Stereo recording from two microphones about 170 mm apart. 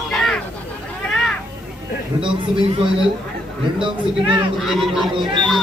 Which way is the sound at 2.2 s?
30° right (ahead or behind).